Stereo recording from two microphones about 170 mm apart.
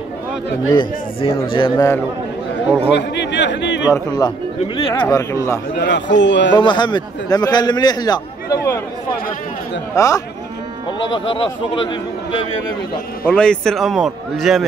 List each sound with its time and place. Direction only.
0.7 s a man's voice: 30° left (ahead or behind)
2.9 s speech: 90° left
3.9 s a man's voice: 25° left (ahead or behind)
5.0 s speech: 20° left (ahead or behind)
5.8 s a man's voice: 90° left
6.5 s a man's voice: 25° left (ahead or behind)
9.9 s a man's voice: 20° left (ahead or behind)
11.2 s speech: 30° left (ahead or behind)
13.3 s a man's voice: 5° left (ahead or behind)